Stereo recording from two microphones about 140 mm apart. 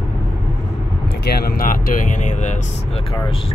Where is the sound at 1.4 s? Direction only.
85° left; by 2.5 s 60° left (ahead or behind).